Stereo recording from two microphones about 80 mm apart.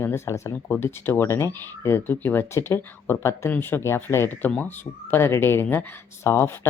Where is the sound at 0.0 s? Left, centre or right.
Left.